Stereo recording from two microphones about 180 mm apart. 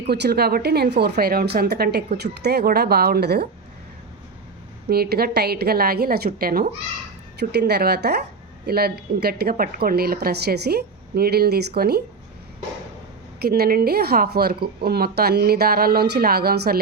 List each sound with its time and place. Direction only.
0.1 s speech: 65° right (ahead or behind)
4.9 s speech: 60° right (ahead or behind)
13.4 s speech: 60° right (ahead or behind)